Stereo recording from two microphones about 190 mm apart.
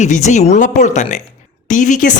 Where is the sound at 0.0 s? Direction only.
40° left (ahead or behind).